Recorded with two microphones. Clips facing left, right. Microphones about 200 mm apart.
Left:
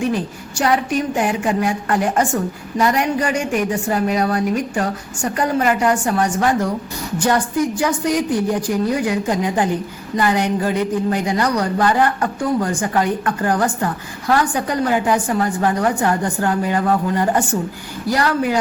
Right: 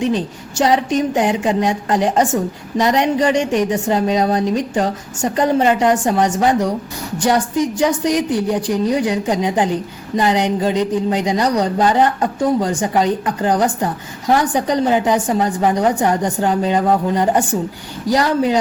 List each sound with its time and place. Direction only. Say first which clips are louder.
0.0 s a woman's voice: right 2 dB; 20° right (ahead or behind)